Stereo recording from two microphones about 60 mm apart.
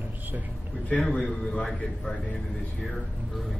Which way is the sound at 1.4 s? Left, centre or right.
Centre.